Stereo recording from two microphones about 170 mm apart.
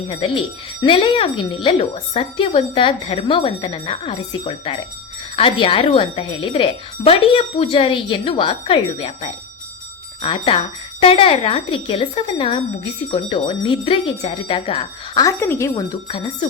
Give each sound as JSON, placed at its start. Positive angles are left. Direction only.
{"t": 0.1, "sound": "speech", "side_deg": 30}
{"t": 15.2, "sound": "speech", "side_deg": 15}